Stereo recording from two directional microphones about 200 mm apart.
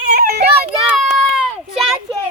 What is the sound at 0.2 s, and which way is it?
Children playing, 50° right (ahead or behind).